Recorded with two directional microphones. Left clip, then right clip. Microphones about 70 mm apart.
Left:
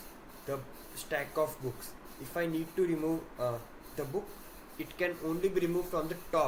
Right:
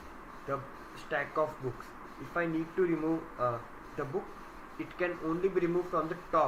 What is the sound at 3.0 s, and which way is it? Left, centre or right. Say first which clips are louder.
Speech: right 2 dB; left.